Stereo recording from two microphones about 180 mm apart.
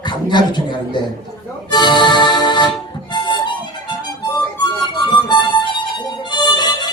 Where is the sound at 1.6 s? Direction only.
25° left (ahead or behind).